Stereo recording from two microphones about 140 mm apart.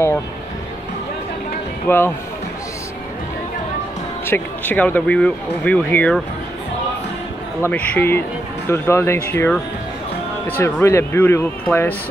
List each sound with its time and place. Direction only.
1.9 s speech: 15° left (ahead or behind)
4.3 s speech: 10° left (ahead or behind)
7.6 s speech: 10° left (ahead or behind)
10.6 s speech: 20° left (ahead or behind)